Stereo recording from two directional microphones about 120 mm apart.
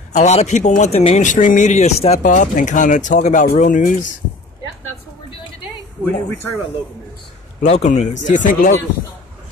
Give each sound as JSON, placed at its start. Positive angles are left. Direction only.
{"t": 0.1, "sound": "a man's voice", "side_deg": 70}
{"t": 6.0, "sound": "speech", "side_deg": 20}
{"t": 7.6, "sound": "speech", "side_deg": 70}